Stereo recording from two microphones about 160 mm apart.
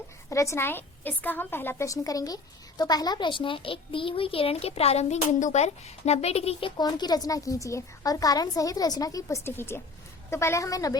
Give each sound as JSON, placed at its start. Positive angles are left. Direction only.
{"t": 0.3, "sound": "a woman's voice", "side_deg": 20}